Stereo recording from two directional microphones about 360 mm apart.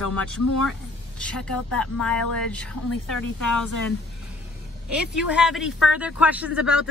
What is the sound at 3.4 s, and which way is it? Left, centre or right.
Speech, left.